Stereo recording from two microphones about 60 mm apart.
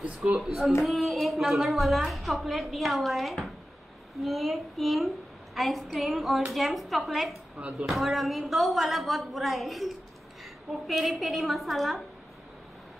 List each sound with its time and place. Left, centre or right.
0.0 s speech: centre
0.4 s a woman's voice: centre